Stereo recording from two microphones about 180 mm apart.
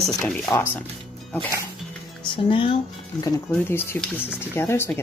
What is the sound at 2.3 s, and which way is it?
Speech, 30° left (ahead or behind).